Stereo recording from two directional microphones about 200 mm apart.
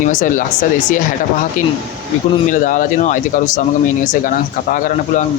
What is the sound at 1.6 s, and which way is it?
Speech, 40° left (ahead or behind).